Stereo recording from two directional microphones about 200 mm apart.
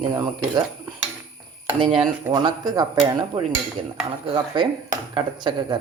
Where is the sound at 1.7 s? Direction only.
25° right (ahead or behind).